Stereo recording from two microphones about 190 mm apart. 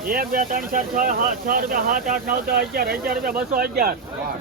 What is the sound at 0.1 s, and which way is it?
Speech, 50° right (ahead or behind).